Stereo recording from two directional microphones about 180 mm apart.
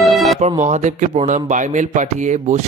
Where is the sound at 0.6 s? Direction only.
40° right (ahead or behind).